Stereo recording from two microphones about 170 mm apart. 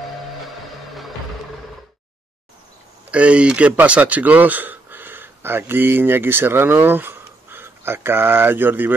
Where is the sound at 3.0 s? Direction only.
5° right (ahead or behind).